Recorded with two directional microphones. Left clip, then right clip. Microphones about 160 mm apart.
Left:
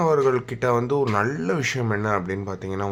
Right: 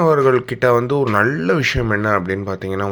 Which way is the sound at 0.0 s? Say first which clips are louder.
Right 6 dB; 20° right (ahead or behind).